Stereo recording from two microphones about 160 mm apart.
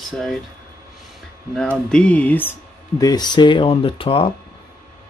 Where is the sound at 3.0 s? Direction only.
25° left (ahead or behind).